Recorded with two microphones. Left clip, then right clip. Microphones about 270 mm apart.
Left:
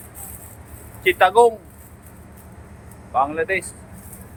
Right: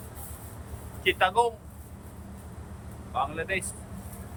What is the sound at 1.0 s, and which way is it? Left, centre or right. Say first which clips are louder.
Speech: left 10 dB; left.